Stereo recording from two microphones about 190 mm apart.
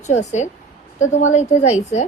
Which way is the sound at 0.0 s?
35° left (ahead or behind).